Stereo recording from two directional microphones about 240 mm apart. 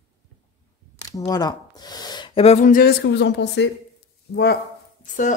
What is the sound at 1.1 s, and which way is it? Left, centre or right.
Speech, centre.